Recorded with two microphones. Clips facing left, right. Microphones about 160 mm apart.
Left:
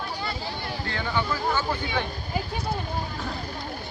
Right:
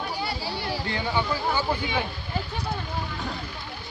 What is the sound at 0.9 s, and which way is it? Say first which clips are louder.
Speech: even; 15° right (ahead or behind).